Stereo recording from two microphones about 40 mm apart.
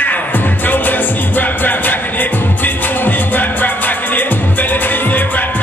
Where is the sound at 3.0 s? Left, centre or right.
Left.